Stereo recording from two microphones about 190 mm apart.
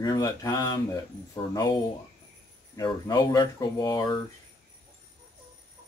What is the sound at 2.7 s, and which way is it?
Speech, 20° left (ahead or behind).